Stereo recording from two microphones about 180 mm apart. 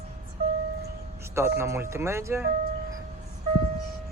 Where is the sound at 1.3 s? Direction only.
15° right (ahead or behind).